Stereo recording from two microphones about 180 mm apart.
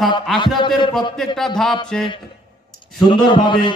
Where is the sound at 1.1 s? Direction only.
Centre (ahead or behind).